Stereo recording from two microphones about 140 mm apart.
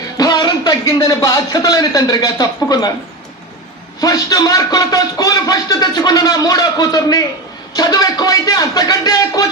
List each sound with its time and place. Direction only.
0.2 s a man's voice: 30° left (ahead or behind)
4.0 s a man's voice: 25° left (ahead or behind)